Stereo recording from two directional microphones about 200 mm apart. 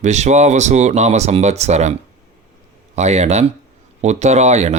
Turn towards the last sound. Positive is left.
turn(degrees=-35)  # may be behind; listen again after turning